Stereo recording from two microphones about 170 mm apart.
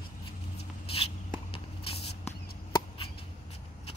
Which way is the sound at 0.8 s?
35° left (ahead or behind).